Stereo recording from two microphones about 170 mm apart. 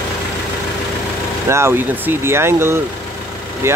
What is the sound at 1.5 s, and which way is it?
Speech, 15° right (ahead or behind).